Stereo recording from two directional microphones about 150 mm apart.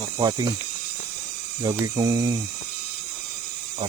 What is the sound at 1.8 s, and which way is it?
Speech, 25° right (ahead or behind).